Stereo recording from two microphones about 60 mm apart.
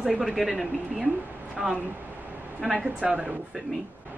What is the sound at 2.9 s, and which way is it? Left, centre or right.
Speech, right.